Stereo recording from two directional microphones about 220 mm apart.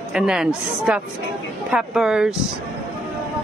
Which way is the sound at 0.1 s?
Centre (ahead or behind).